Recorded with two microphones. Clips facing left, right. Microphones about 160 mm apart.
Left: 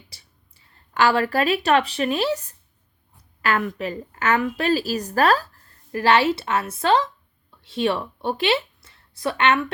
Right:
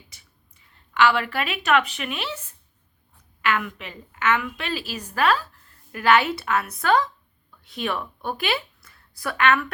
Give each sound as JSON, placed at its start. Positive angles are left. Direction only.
{"t": 0.1, "sound": "speech", "side_deg": 35}
{"t": 3.4, "sound": "a woman's voice", "side_deg": 40}